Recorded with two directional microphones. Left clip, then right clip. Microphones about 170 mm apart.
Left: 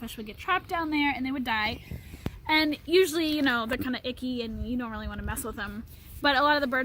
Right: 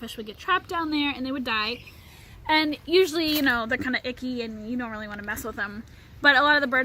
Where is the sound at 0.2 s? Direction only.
35° left (ahead or behind).